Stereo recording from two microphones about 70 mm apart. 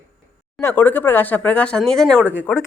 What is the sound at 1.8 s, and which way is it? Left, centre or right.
Speech, centre.